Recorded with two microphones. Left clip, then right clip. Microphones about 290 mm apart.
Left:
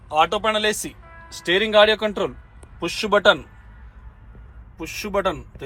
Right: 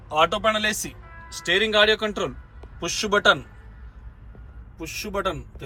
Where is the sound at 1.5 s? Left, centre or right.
Centre.